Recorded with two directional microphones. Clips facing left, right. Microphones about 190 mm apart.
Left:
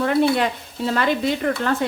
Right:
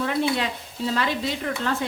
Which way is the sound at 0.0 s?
55° left (ahead or behind).